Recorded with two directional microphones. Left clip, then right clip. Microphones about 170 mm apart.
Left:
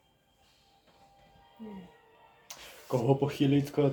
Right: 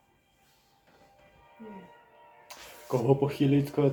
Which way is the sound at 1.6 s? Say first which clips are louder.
Right 1 dB; 35° left (ahead or behind).